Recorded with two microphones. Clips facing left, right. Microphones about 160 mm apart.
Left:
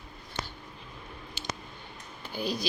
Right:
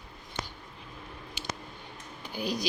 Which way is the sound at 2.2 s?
15° right (ahead or behind).